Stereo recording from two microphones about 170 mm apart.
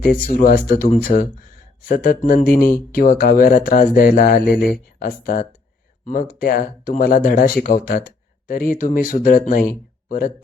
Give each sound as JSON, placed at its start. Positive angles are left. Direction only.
{"t": 0.0, "sound": "speech", "side_deg": 55}